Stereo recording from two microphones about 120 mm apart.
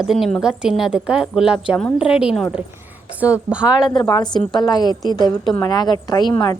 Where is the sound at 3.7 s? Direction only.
35° left (ahead or behind).